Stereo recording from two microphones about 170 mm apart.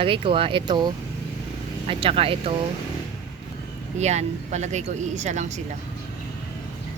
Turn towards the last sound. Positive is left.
turn(degrees=-45)  # may be behind; listen again after turning